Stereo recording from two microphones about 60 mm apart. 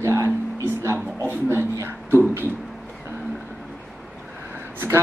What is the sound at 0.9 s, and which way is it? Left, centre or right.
Speech, right.